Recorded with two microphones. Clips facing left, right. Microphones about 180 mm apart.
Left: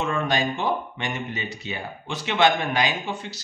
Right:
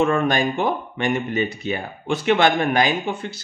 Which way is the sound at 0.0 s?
55° right (ahead or behind).